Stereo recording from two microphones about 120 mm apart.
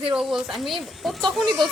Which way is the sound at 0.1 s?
5° right (ahead or behind).